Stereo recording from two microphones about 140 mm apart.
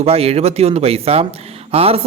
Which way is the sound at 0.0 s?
45° right (ahead or behind).